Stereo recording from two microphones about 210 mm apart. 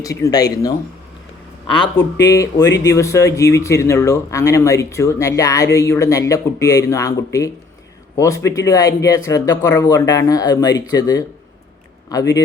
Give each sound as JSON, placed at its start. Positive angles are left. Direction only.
{"t": 0.0, "sound": "speech", "side_deg": 15}
{"t": 1.7, "sound": "speech", "side_deg": 20}
{"t": 8.2, "sound": "speech", "side_deg": 15}